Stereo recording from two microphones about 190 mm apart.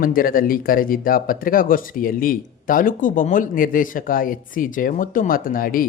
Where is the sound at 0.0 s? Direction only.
50° left (ahead or behind).